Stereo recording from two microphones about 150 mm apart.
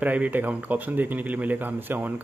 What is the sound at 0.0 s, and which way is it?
Speech, 10° right (ahead or behind).